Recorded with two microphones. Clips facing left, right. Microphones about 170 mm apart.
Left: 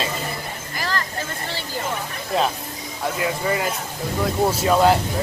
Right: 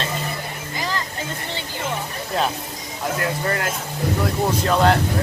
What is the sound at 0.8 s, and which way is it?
Vehicle, 15° right (ahead or behind).